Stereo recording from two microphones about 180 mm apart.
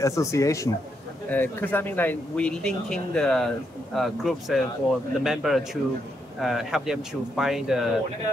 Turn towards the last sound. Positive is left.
turn(degrees=0)  # may be behind; listen again after turning